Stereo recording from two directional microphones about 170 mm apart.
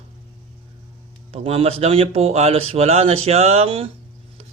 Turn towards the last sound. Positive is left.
turn(degrees=-35)  # may be behind; listen again after turning